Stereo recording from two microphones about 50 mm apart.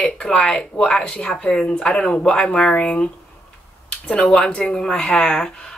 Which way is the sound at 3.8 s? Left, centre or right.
Left.